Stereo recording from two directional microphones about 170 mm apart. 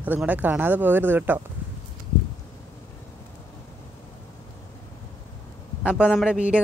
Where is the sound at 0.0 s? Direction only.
10° right (ahead or behind).